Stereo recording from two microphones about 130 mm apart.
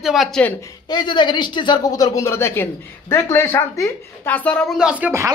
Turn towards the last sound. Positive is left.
turn(degrees=-15)  # may be behind; listen again after turning